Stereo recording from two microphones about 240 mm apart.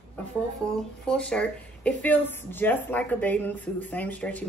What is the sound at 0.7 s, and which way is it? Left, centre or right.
A woman's voice, centre.